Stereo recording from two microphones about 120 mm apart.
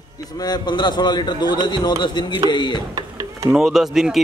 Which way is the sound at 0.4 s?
35° left (ahead or behind).